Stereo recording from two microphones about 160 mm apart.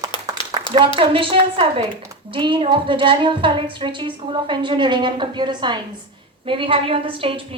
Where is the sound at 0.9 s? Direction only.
35° right (ahead or behind).